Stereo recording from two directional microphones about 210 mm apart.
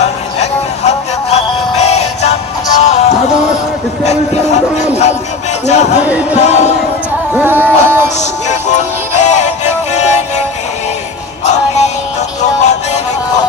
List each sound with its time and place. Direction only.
0.0 s music: 30° left (ahead or behind)
5.7 s speech: 30° left (ahead or behind)
7.3 s music: 10° right (ahead or behind)
8.2 s music: 35° left (ahead or behind)
12.4 s music: 35° left (ahead or behind)